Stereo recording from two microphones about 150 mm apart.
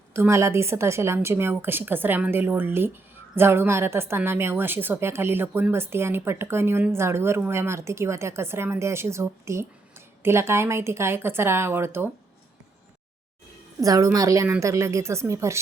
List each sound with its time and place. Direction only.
0.1 s a woman's voice: 15° right (ahead or behind)
13.8 s a woman's voice: 25° right (ahead or behind)